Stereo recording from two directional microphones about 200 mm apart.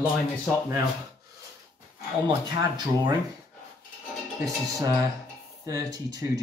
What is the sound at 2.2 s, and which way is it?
Speech, 20° right (ahead or behind).